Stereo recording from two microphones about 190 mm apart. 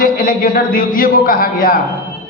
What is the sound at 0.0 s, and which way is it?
A man's voice, 50° left (ahead or behind).